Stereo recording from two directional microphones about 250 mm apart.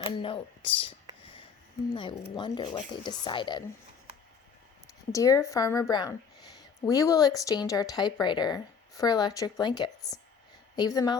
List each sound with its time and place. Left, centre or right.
0.0 s speech: left
5.1 s speech: centre